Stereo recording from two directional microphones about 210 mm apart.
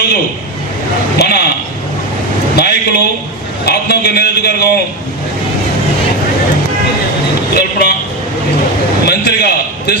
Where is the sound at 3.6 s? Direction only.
50° left (ahead or behind).